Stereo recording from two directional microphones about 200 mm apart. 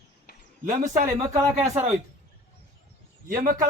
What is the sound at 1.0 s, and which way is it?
Speech, 15° right (ahead or behind).